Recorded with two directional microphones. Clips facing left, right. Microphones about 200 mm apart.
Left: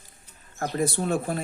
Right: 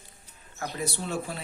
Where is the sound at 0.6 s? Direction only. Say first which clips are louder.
Left 7 dB; 50° left (ahead or behind).